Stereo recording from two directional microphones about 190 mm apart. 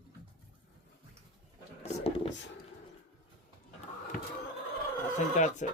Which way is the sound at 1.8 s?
30° left (ahead or behind).